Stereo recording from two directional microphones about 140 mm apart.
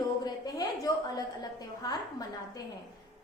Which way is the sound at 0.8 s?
25° left (ahead or behind).